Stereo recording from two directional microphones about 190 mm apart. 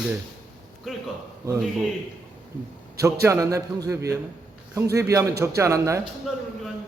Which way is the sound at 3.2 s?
15° right (ahead or behind).